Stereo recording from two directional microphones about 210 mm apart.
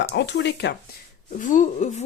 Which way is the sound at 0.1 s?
55° left (ahead or behind).